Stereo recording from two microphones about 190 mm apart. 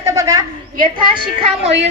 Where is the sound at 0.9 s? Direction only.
30° right (ahead or behind).